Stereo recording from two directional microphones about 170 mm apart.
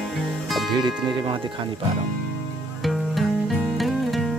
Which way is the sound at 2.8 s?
Centre (ahead or behind).